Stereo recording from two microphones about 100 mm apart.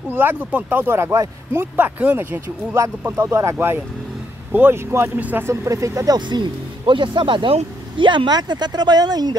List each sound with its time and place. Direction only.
0.1 s speech: 20° right (ahead or behind)
5.5 s speech: 30° right (ahead or behind)
6.1 s speech: 50° right (ahead or behind)